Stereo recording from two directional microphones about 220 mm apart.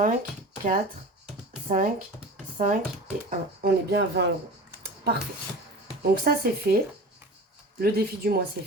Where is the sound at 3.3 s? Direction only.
50° right (ahead or behind).